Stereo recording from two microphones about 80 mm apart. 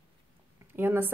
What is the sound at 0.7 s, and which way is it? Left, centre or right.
Speech, right.